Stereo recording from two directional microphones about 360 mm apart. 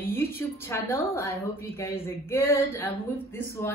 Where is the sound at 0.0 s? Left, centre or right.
Centre.